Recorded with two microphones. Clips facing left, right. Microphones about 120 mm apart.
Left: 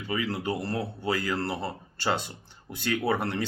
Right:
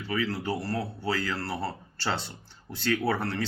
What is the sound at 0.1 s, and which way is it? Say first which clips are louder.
Speech: even; 20° left (ahead or behind).